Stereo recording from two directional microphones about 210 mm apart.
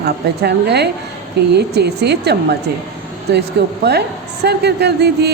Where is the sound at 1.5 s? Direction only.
50° right (ahead or behind).